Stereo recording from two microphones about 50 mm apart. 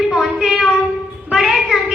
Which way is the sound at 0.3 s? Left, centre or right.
Centre.